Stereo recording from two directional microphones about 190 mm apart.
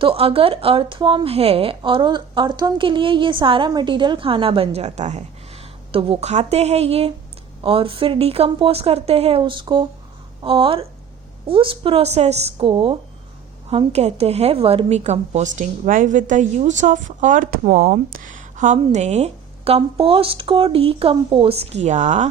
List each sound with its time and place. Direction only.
0.0 s a woman's voice: 30° right (ahead or behind)